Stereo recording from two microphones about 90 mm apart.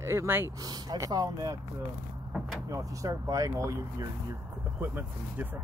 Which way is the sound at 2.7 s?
40° right (ahead or behind).